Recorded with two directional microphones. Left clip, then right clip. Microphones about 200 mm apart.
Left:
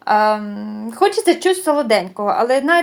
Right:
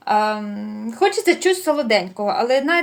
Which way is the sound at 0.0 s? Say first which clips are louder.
Left 4 dB; 25° left (ahead or behind).